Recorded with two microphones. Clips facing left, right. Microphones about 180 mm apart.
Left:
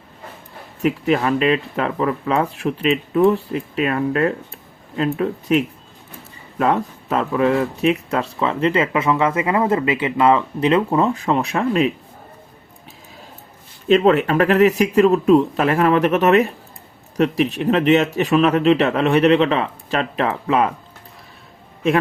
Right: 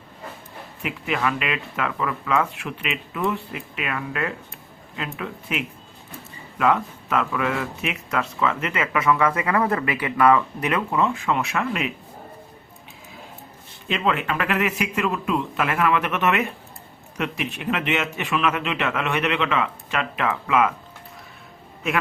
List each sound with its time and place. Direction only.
0.8 s speech: 40° left (ahead or behind)
13.8 s speech: 40° left (ahead or behind)